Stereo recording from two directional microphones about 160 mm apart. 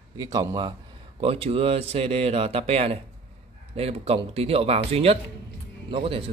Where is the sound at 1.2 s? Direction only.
35° right (ahead or behind).